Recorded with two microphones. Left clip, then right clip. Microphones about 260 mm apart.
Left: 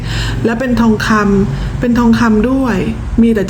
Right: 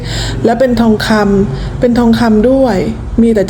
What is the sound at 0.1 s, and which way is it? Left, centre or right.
Speech, centre.